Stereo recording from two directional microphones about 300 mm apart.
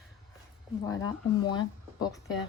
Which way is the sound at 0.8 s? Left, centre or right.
Centre.